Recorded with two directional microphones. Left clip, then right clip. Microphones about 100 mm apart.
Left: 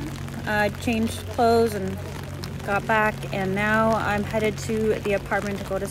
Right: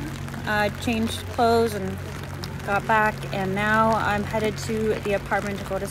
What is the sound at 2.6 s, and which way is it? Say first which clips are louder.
Speech: right 1 dB; 30° left (ahead or behind).